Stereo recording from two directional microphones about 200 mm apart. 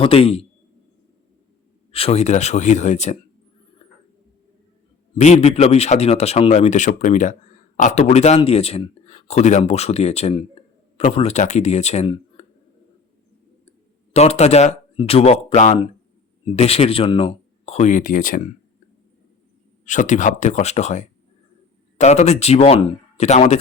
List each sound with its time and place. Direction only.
0.0 s a man's voice: 30° left (ahead or behind)
1.9 s speech: 30° left (ahead or behind)
5.1 s speech: 35° left (ahead or behind)
14.1 s speech: 30° left (ahead or behind)
19.8 s speech: 40° left (ahead or behind)